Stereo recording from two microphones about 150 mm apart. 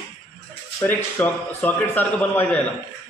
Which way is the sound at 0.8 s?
10° left (ahead or behind).